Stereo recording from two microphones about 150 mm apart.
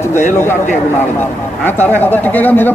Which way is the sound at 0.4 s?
15° left (ahead or behind).